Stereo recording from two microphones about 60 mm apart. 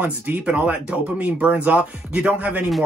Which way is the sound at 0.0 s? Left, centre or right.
Right.